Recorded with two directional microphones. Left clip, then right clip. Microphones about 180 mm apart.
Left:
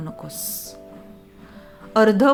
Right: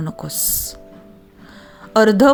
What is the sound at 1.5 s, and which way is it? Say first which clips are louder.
Music: right 5 dB; 40° right (ahead or behind).